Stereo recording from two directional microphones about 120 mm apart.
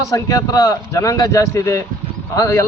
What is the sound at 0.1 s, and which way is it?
A man's voice, 30° left (ahead or behind).